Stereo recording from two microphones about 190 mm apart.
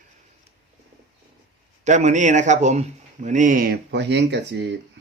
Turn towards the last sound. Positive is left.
turn(degrees=-65)  # may be behind; listen again after turning